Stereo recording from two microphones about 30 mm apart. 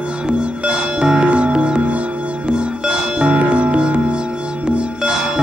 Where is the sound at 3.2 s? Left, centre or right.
Right.